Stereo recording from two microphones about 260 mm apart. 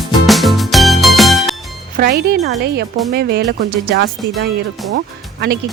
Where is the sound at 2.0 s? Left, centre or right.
Right.